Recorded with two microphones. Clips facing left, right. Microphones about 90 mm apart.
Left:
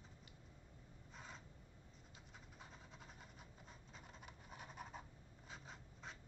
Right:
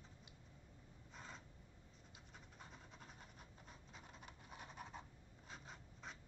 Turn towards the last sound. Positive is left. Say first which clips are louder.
# even
turn(degrees=0)  # may be behind; listen again after turning